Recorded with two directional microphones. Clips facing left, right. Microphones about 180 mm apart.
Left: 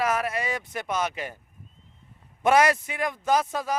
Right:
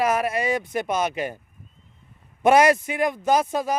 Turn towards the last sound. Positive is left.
turn(degrees=-15)  # may be behind; listen again after turning